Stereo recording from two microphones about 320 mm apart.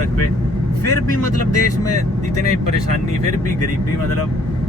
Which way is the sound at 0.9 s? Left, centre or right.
Left.